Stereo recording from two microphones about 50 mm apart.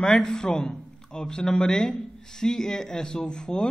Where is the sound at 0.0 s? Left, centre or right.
Centre.